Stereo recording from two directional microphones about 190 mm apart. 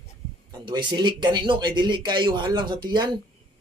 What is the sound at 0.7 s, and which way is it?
Speech, 25° right (ahead or behind).